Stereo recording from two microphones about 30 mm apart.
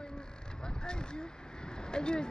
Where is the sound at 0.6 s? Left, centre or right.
Left.